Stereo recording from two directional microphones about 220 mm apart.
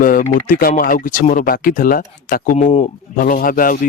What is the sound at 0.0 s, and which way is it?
Speech, 40° left (ahead or behind).